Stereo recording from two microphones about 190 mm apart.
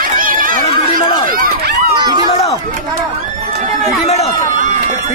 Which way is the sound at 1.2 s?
50° right (ahead or behind).